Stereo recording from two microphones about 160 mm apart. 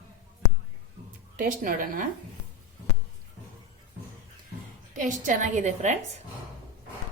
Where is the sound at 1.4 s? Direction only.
60° right (ahead or behind).